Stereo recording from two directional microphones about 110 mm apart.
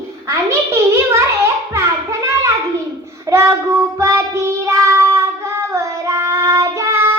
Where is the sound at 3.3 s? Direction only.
25° right (ahead or behind).